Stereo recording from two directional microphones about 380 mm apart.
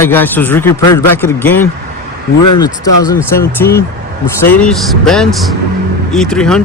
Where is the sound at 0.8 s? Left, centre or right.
Left.